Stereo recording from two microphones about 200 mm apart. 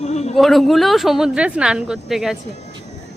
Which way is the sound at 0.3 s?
Centre (ahead or behind).